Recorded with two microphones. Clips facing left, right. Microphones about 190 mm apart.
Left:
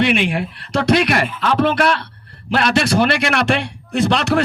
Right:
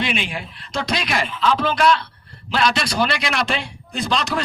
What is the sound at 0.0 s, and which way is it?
A man's voice, 65° left (ahead or behind).